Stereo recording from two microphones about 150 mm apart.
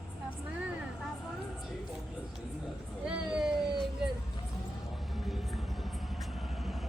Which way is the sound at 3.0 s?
5° right (ahead or behind).